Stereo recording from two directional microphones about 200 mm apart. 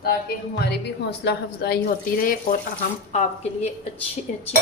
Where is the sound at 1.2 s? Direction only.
55° left (ahead or behind).